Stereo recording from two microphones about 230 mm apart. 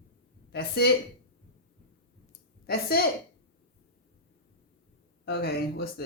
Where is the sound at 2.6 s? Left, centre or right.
Left.